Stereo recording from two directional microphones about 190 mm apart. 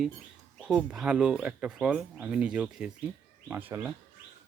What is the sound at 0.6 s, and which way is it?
Speech, 5° right (ahead or behind).